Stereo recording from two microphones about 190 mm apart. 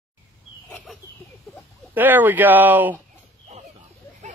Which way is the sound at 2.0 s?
10° right (ahead or behind).